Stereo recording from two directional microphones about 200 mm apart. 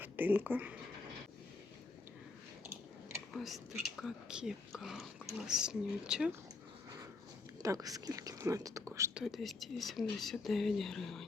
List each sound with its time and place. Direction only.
0.0 s speech: 10° right (ahead or behind)
3.3 s speech: centre (ahead or behind)
7.6 s speech: 15° right (ahead or behind)
9.2 s speech: centre (ahead or behind)